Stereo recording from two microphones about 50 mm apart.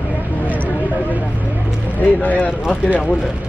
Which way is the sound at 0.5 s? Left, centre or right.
Left.